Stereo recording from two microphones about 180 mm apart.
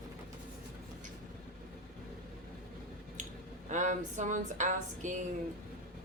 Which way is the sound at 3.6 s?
45° right (ahead or behind).